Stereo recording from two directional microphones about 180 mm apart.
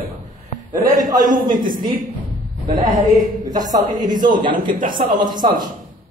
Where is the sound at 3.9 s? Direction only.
45° right (ahead or behind).